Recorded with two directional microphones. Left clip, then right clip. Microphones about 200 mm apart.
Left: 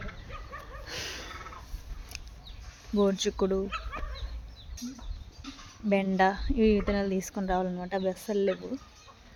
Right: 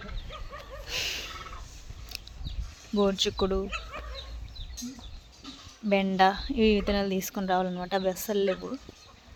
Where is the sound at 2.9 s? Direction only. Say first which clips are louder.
Right 1 dB; 10° left (ahead or behind).